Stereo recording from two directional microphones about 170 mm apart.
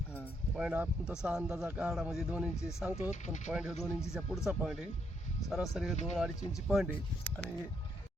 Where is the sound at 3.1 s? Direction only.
45° left (ahead or behind).